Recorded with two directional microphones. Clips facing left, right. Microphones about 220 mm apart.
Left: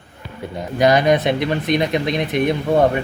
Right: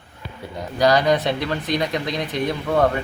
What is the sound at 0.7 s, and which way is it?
Speech, 20° left (ahead or behind).